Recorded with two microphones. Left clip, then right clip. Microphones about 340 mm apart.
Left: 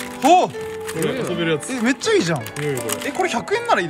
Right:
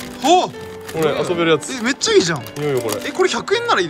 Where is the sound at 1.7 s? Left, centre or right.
Centre.